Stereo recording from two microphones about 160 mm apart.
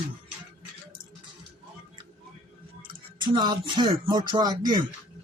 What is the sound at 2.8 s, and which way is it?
Speech, 30° right (ahead or behind).